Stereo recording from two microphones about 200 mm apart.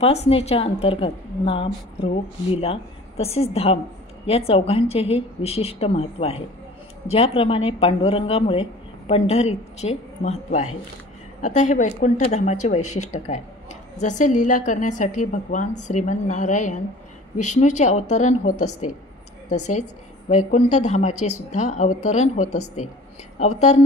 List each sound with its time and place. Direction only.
0.0 s a woman's voice: 30° left (ahead or behind)